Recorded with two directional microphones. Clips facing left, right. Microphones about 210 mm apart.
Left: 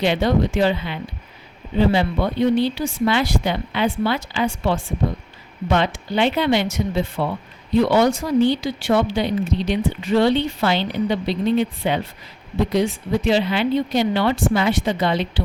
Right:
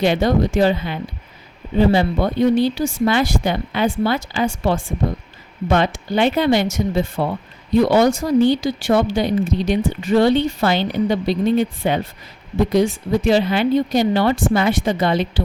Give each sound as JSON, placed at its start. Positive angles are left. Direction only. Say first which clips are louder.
{"t": 0.0, "sound": "speech", "louder": "right 2 dB", "side_deg": -45}